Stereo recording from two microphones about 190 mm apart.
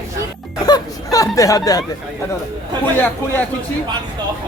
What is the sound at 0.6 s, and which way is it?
Speech, 20° left (ahead or behind).